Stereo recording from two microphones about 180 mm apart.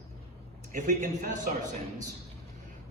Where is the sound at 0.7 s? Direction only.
45° right (ahead or behind).